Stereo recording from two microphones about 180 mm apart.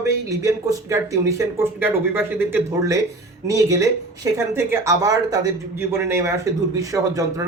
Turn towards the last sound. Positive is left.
turn(degrees=-20)  # may be behind; listen again after turning